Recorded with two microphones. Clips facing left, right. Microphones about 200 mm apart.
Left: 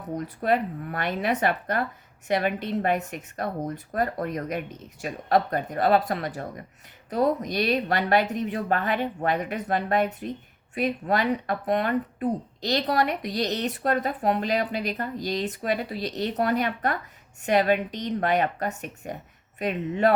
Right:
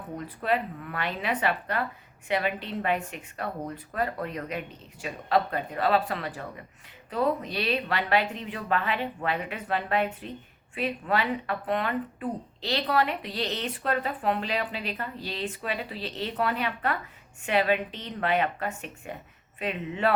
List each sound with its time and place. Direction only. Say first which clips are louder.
0.1 s speech: left 4 dB; 40° left (ahead or behind)